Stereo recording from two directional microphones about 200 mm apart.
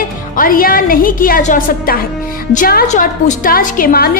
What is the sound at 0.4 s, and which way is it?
A woman's voice, 45° left (ahead or behind).